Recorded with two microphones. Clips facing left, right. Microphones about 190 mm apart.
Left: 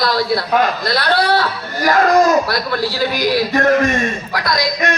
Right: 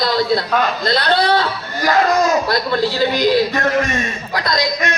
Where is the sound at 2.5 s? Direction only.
20° right (ahead or behind).